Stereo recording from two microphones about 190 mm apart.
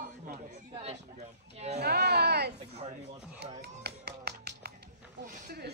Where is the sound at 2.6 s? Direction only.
35° right (ahead or behind).